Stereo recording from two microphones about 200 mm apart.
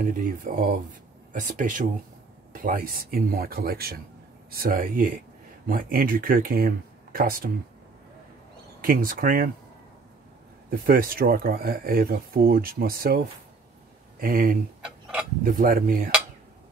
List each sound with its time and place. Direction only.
0.0 s speech: 45° right (ahead or behind)
8.8 s speech: 45° right (ahead or behind)
10.7 s speech: 45° right (ahead or behind)
14.2 s speech: 45° right (ahead or behind)
14.8 s a sound: 5° right (ahead or behind)
15.4 s speech: 45° right (ahead or behind)